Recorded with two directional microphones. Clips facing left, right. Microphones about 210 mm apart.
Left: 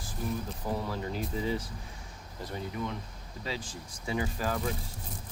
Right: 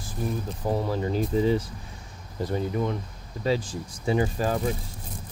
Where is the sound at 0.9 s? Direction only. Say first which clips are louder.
Right 8 dB; 30° right (ahead or behind).